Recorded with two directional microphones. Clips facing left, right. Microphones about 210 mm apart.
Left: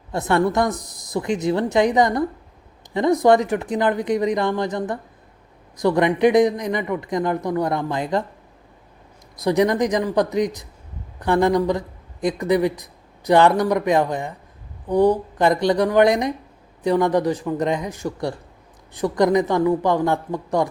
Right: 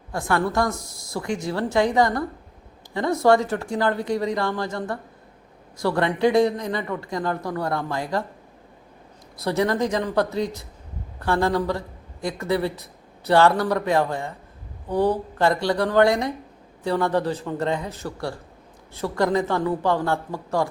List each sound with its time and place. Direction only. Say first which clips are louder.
0.1 s speech: left 4 dB; 20° left (ahead or behind)
9.4 s speech: left 4 dB; 15° left (ahead or behind)